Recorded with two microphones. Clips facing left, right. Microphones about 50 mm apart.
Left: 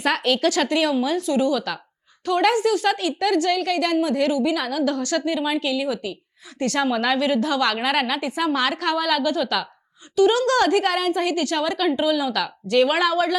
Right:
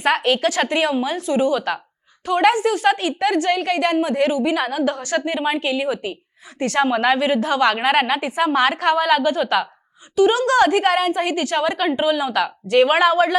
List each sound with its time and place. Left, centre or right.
0.0 s a woman's voice: right
10.2 s a woman's voice: centre